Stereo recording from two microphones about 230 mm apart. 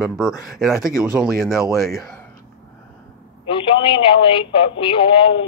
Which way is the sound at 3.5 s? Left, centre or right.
Left.